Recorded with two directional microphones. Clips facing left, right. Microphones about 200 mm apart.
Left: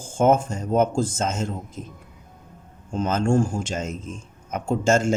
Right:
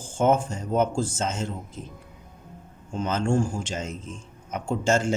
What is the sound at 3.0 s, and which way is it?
Speech, 45° left (ahead or behind).